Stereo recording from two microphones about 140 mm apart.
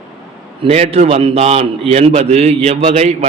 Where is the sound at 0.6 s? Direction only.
45° right (ahead or behind).